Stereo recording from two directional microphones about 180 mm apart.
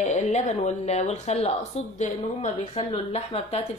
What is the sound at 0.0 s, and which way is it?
Speech, 40° left (ahead or behind).